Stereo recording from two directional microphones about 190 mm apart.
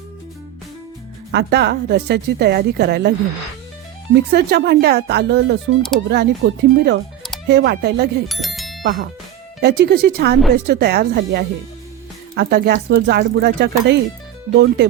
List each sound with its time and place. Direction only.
1.3 s a woman's voice: 65° right (ahead or behind)
4.1 s a woman's voice: 60° right (ahead or behind)
8.3 s bicycle bell: centre (ahead or behind)
8.8 s a woman's voice: 55° right (ahead or behind)